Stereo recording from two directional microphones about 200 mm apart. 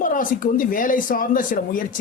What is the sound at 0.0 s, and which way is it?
Speech, 40° left (ahead or behind).